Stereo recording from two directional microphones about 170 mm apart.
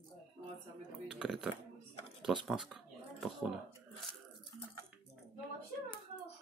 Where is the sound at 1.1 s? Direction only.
5° right (ahead or behind).